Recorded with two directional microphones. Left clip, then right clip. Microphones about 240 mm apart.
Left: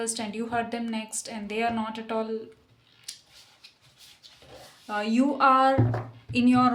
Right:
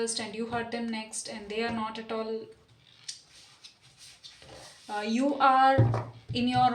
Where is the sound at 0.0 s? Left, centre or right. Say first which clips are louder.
Left 1 dB; left.